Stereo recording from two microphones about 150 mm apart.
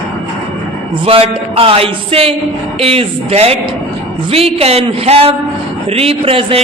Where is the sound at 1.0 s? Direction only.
40° right (ahead or behind).